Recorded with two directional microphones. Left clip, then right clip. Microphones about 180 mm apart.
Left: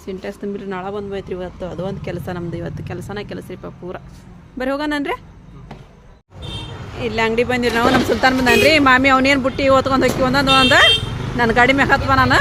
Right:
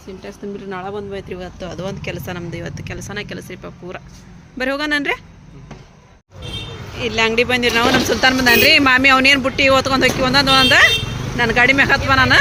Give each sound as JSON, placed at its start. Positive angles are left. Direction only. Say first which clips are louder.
{"t": 0.5, "sound": "speech", "louder": "right 2 dB", "side_deg": 15}
{"t": 7.0, "sound": "speech", "louder": "right 2 dB", "side_deg": 10}